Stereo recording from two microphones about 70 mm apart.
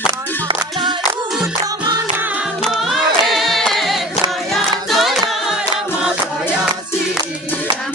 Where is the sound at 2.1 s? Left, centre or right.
Right.